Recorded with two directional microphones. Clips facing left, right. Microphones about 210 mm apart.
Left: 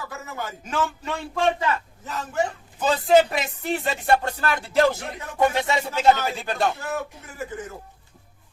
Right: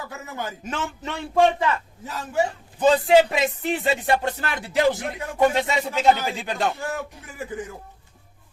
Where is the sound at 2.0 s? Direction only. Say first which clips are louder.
Right 2 dB; 10° right (ahead or behind).